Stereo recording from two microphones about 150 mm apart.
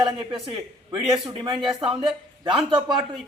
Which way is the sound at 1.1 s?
30° right (ahead or behind).